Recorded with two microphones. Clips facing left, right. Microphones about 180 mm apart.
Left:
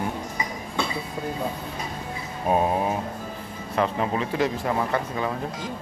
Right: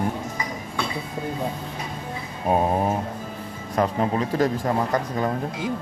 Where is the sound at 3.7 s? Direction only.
40° right (ahead or behind).